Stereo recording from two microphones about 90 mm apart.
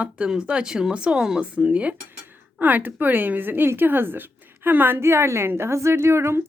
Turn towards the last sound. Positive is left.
turn(degrees=-30)  # may be behind; listen again after turning